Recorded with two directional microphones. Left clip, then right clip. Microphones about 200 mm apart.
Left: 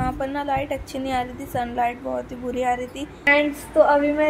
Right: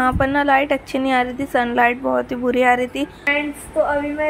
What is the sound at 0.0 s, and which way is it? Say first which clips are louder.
A woman's voice: right 8 dB; 20° right (ahead or behind).